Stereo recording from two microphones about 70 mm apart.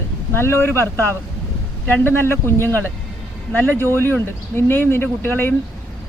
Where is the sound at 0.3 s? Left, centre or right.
Left.